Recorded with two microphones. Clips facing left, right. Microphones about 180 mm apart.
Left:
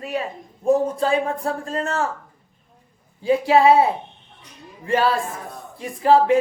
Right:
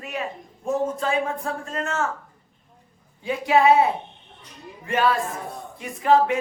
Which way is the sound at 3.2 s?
30° left (ahead or behind).